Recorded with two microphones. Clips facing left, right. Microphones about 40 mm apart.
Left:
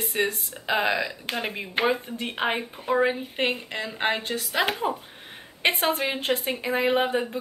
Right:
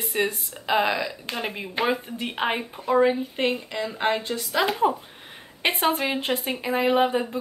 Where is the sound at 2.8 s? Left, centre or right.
Centre.